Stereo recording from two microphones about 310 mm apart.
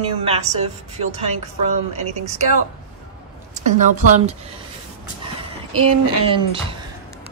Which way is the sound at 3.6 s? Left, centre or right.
Right.